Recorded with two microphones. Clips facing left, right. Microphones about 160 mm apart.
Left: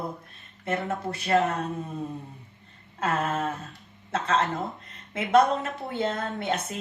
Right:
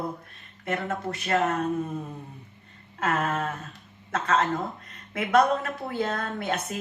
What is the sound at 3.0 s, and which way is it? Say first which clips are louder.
A woman's voice: even; 25° left (ahead or behind).